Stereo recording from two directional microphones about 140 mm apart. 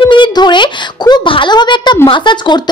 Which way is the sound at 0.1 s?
35° left (ahead or behind).